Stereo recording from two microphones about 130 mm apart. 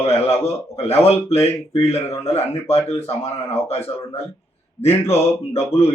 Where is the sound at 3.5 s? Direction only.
50° left (ahead or behind).